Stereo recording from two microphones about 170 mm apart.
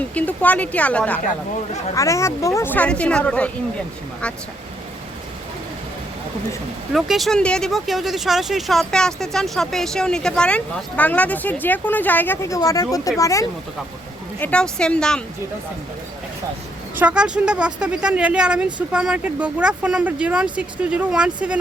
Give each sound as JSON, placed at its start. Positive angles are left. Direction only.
{"t": 0.1, "sound": "speech", "side_deg": 10}
{"t": 6.9, "sound": "speech", "side_deg": 0}
{"t": 14.3, "sound": "speech", "side_deg": 10}
{"t": 17.0, "sound": "speech", "side_deg": -5}